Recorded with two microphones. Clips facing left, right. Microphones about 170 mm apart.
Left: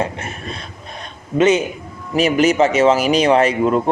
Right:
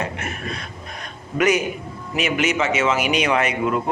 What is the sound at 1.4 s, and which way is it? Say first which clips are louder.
A man's voice: left 5 dB; 25° left (ahead or behind).